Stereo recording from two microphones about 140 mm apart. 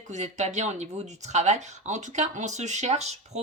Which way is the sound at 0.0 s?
55° right (ahead or behind).